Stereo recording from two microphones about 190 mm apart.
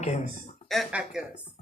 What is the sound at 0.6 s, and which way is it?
Speech, centre (ahead or behind).